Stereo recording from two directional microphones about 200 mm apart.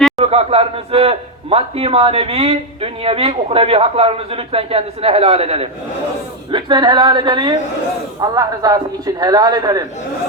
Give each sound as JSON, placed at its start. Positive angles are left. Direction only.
{"t": 0.3, "sound": "a man's voice", "side_deg": -30}